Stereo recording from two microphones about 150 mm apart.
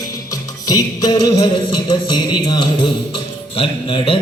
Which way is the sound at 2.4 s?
30° left (ahead or behind).